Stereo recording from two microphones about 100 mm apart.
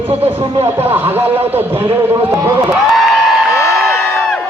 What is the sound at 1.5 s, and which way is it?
A man's voice, 20° right (ahead or behind).